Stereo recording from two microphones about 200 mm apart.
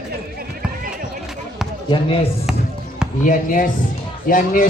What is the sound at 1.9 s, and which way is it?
Speech, 30° left (ahead or behind).